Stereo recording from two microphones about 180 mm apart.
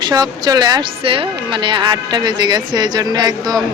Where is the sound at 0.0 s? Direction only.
25° right (ahead or behind).